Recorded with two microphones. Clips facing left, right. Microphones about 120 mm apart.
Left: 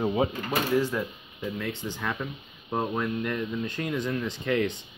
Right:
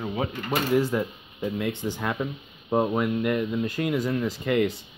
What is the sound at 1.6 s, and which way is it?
Speech, 15° right (ahead or behind).